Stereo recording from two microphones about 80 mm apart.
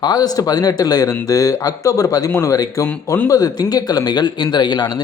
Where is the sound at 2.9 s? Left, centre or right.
Left.